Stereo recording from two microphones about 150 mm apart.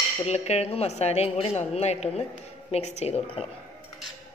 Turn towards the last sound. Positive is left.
turn(degrees=40)  # may be behind; listen again after turning